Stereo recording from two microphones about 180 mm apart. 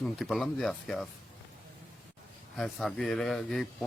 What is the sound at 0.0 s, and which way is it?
Speech, centre (ahead or behind).